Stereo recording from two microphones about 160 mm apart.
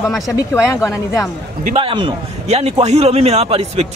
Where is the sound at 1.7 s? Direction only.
35° right (ahead or behind).